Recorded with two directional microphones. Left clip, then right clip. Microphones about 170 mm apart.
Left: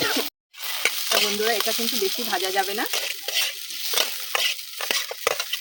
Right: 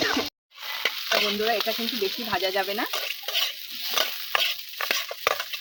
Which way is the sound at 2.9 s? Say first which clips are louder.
Left 2 dB; 30° left (ahead or behind).